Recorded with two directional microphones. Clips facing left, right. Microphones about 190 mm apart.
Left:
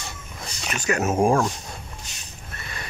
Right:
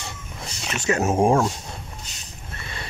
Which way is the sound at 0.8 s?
25° right (ahead or behind).